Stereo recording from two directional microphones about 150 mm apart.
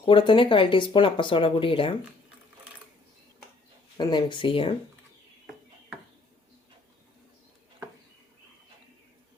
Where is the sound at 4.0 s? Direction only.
30° left (ahead or behind).